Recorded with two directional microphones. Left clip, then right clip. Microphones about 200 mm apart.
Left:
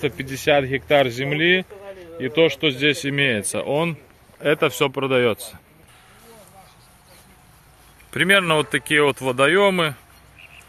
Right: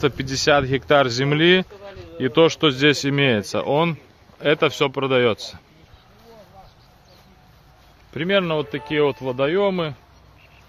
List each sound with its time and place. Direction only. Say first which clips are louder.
0.0 s speech: right 3 dB; 20° right (ahead or behind); by 5.6 s centre (ahead or behind)
8.1 s speech: left 4 dB; 10° left (ahead or behind)